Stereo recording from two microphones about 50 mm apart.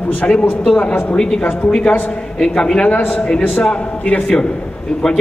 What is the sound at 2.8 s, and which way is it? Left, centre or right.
A man's voice, left.